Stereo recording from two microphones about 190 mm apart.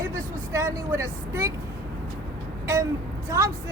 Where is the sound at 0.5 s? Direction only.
15° right (ahead or behind).